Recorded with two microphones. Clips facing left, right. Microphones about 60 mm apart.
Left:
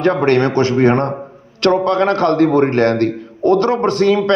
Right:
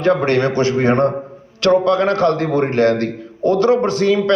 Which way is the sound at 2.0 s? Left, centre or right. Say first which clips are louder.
Left 3 dB; left.